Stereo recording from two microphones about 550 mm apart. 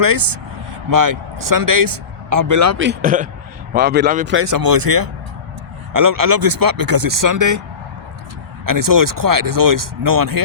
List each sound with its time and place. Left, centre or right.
0.0 s speech: right; by 4.4 s centre
4.4 s speech: right
8.6 s speech: right